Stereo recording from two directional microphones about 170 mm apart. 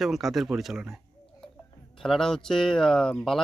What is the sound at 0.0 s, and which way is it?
Speech, centre (ahead or behind).